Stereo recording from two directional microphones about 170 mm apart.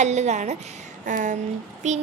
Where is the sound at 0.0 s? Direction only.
40° right (ahead or behind).